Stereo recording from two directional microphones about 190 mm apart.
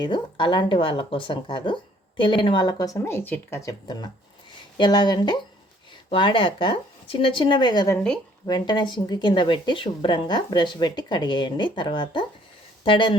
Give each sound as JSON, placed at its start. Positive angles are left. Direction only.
{"t": 0.0, "sound": "speech", "side_deg": 25}